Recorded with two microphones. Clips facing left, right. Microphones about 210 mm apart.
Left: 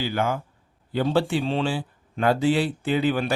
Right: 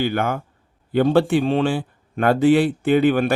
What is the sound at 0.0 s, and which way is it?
Speech, 60° right (ahead or behind).